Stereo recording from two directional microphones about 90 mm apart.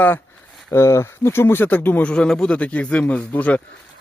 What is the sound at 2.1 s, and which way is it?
Speech, 10° left (ahead or behind).